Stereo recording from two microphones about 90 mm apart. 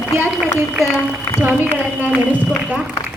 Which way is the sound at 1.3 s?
20° right (ahead or behind).